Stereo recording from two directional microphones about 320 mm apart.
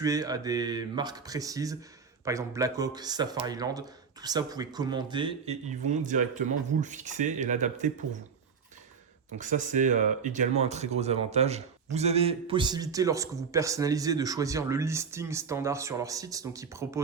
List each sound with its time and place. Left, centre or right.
0.0 s a man's voice: centre
9.4 s a man's voice: right